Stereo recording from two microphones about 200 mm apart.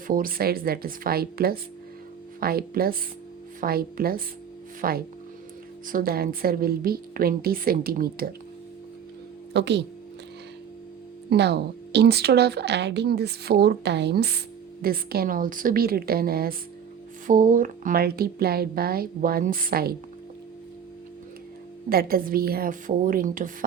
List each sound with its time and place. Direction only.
0.1 s a woman's voice: 45° right (ahead or behind)
9.5 s speech: 60° right (ahead or behind)
11.3 s a woman's voice: 55° right (ahead or behind)
21.8 s a woman's voice: 50° right (ahead or behind)